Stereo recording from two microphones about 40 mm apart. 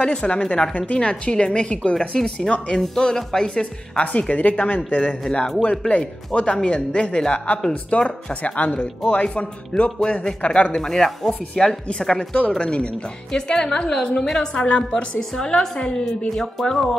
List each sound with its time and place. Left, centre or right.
0.0 s speech: left
2.0 s a woman's voice: centre
10.8 s a woman's voice: centre
12.4 s a woman's voice: left; by 14.4 s centre
14.4 s speech: left
14.9 s a woman's voice: centre